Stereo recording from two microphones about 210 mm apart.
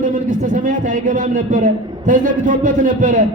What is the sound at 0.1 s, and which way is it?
A man's voice, 40° right (ahead or behind).